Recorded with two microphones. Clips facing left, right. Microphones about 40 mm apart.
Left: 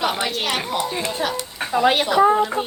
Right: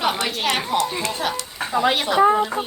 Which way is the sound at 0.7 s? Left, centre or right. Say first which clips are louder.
Right 1 dB; centre.